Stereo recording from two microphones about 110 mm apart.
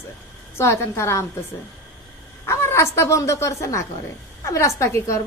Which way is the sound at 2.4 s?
25° left (ahead or behind).